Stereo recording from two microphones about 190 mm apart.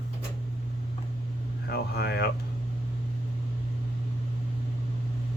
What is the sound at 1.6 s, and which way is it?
Speech, 60° left (ahead or behind).